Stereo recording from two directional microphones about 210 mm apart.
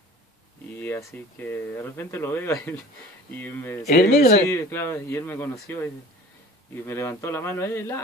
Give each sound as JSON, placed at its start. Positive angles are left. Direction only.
{"t": 0.7, "sound": "speech", "side_deg": 10}
{"t": 3.8, "sound": "speech", "side_deg": 45}
{"t": 4.5, "sound": "speech", "side_deg": 10}
{"t": 6.9, "sound": "speech", "side_deg": 10}